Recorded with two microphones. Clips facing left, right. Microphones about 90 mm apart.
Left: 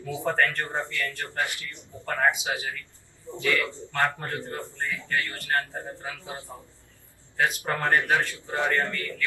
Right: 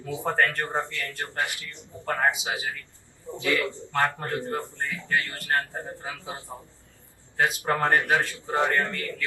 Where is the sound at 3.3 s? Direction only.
20° right (ahead or behind).